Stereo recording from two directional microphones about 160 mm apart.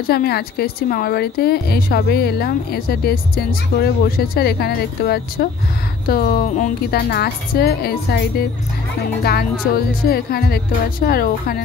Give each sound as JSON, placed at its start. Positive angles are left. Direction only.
{"t": 0.0, "sound": "speech", "side_deg": 75}